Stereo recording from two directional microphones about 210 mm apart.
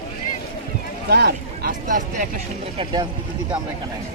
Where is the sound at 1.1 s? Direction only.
50° right (ahead or behind).